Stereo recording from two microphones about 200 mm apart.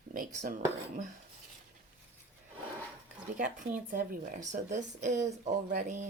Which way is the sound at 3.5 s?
40° right (ahead or behind).